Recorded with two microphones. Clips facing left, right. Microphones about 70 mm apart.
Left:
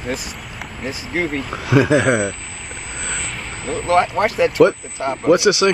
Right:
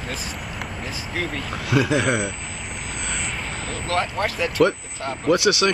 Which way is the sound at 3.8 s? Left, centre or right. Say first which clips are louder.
Left 8 dB; left.